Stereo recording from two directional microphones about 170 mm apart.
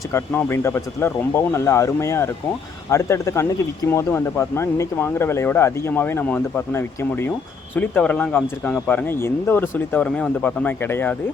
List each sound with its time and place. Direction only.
0.1 s speech: 15° left (ahead or behind)